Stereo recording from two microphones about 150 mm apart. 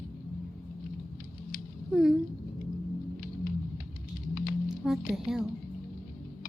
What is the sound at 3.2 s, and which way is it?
Music, 70° left (ahead or behind).